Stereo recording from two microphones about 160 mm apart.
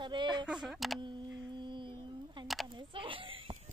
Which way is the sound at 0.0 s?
30° right (ahead or behind).